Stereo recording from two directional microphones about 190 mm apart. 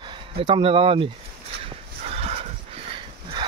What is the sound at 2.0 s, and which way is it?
Dog, 30° right (ahead or behind).